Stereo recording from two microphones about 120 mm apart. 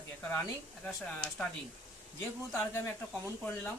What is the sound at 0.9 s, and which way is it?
Speech, 5° left (ahead or behind).